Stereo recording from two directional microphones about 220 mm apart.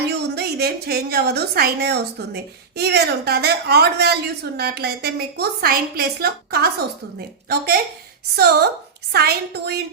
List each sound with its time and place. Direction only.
0.3 s a woman's voice: 45° right (ahead or behind)